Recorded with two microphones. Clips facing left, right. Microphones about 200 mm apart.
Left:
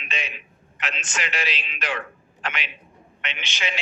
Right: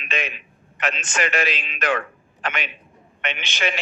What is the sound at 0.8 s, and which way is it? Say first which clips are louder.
A man's voice: right 7 dB; 55° right (ahead or behind).